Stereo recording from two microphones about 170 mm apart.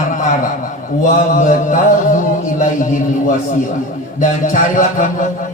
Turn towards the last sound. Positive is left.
turn(degrees=50)  # may be behind; listen again after turning